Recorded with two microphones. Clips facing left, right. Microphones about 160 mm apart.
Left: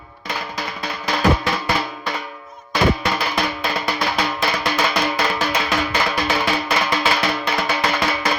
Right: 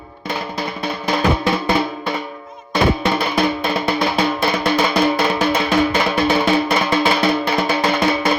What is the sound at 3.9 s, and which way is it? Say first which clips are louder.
Music: right 4 dB; 25° right (ahead or behind).